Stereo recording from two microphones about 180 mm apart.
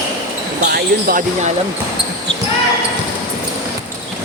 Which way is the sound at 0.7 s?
55° right (ahead or behind).